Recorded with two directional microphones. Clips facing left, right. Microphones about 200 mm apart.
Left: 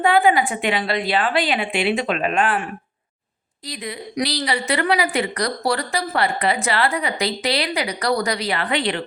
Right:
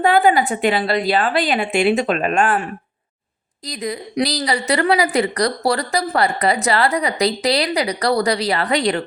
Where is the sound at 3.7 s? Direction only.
40° right (ahead or behind).